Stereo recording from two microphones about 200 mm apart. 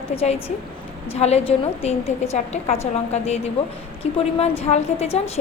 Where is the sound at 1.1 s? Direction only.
30° left (ahead or behind).